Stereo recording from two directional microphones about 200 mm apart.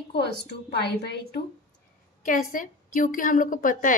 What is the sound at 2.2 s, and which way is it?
A woman's voice, 45° left (ahead or behind).